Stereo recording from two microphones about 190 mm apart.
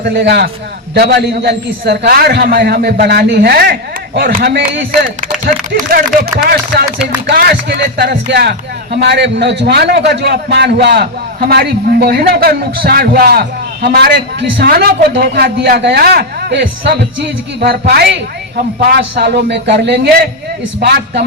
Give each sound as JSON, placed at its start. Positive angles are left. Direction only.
{"t": 0.1, "sound": "a man's voice", "side_deg": -65}
{"t": 7.3, "sound": "a man's voice", "side_deg": -60}